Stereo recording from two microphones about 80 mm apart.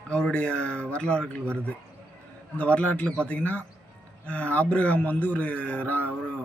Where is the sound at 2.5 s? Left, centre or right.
Centre.